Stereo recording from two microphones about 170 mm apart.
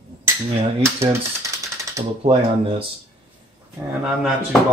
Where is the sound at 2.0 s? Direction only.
20° right (ahead or behind).